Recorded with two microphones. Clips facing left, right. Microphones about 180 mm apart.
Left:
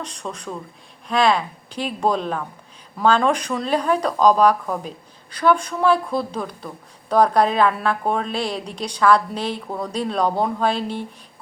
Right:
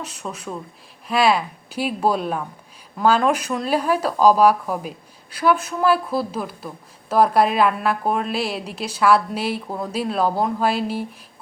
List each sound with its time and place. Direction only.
0.0 s a woman's voice: 5° right (ahead or behind)